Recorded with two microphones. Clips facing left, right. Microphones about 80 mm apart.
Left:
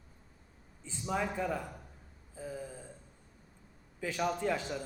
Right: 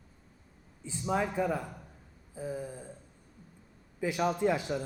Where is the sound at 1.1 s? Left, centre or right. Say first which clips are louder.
Right 4 dB; centre.